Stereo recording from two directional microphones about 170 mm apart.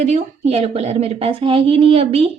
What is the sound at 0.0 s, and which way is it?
A woman's voice, 40° right (ahead or behind).